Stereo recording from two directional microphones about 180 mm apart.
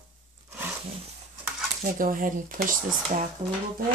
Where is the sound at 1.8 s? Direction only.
50° right (ahead or behind).